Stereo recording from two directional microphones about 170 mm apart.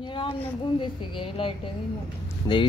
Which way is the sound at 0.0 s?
30° left (ahead or behind).